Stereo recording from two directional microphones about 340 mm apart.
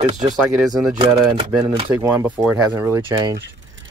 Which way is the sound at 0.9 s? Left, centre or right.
Centre.